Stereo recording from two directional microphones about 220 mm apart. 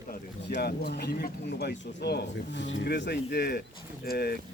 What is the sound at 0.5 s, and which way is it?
Speech, 45° left (ahead or behind).